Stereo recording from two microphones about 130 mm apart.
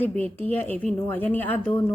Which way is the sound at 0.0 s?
15° left (ahead or behind).